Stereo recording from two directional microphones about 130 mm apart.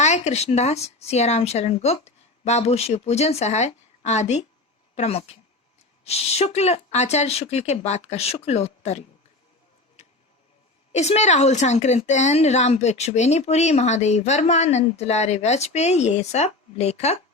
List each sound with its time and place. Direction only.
0.0 s a woman's voice: 60° left (ahead or behind)
10.9 s a woman's voice: 60° left (ahead or behind)